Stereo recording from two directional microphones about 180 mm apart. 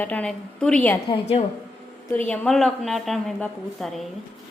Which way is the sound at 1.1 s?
35° left (ahead or behind).